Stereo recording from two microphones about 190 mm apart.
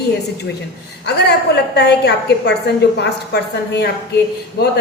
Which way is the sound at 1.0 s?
60° left (ahead or behind).